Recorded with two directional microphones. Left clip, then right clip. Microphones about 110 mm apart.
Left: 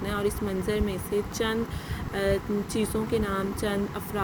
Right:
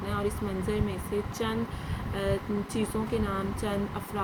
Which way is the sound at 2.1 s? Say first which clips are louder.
Left 4 dB; 50° left (ahead or behind).